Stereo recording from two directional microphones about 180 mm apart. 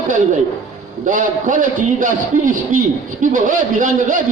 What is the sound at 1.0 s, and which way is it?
A man's voice, 45° right (ahead or behind).